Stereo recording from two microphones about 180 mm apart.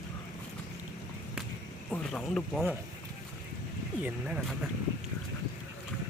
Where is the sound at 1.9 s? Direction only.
Centre (ahead or behind).